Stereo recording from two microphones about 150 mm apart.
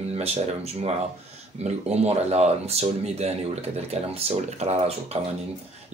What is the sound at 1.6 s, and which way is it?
Speech, 45° right (ahead or behind).